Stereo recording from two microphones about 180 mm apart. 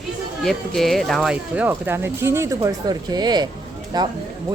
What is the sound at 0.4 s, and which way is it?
Speech, centre (ahead or behind).